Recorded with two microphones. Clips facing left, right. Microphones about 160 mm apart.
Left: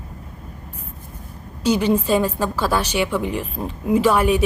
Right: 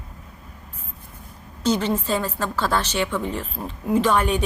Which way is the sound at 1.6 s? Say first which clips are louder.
Left 4 dB; 10° left (ahead or behind).